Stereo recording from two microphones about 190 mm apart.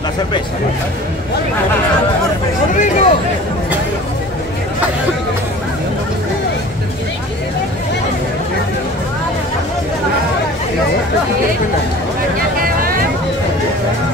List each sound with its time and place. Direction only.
2.7 s speech: 40° left (ahead or behind)
12.6 s vehicle: 50° right (ahead or behind)